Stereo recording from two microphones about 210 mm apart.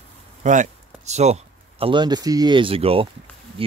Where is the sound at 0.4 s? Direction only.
35° right (ahead or behind).